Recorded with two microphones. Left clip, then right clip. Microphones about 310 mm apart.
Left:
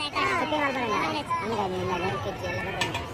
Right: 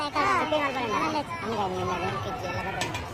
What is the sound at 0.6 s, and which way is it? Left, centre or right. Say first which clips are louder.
Speech: left 1 dB; centre.